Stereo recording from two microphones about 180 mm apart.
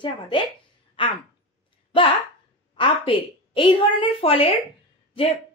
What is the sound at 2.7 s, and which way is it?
Speech, 30° left (ahead or behind).